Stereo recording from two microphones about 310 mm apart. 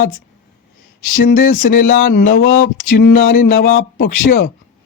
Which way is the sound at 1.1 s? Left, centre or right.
Left.